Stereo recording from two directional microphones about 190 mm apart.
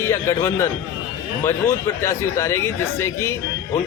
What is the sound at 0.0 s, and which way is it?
Speech, 15° left (ahead or behind).